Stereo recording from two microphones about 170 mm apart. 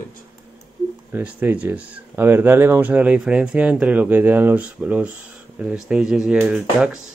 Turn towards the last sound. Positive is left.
turn(degrees=-5)  # may be behind; listen again after turning